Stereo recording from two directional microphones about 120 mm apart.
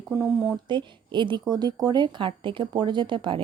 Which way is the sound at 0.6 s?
40° right (ahead or behind).